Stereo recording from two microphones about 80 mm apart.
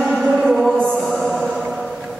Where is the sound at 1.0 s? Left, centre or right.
Centre.